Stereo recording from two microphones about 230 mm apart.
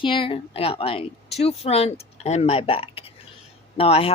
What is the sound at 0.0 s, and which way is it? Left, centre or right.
Speech, left.